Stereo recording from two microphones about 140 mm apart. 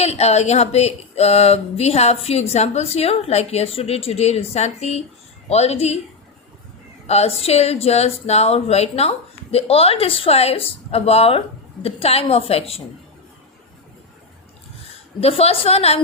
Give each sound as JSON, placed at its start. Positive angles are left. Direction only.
{"t": 0.0, "sound": "speech", "side_deg": 50}
{"t": 7.1, "sound": "speech", "side_deg": 45}
{"t": 15.2, "sound": "speech", "side_deg": 45}